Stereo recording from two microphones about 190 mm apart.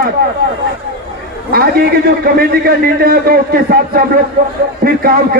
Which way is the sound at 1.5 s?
50° right (ahead or behind).